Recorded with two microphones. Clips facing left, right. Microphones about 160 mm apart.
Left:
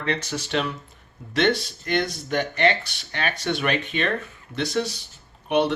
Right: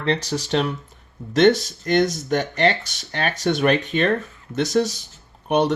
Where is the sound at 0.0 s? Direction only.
35° right (ahead or behind).